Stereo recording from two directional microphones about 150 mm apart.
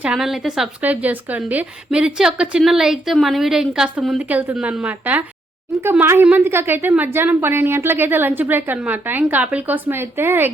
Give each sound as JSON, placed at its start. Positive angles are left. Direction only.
{"t": 0.0, "sound": "a woman's voice", "side_deg": -5}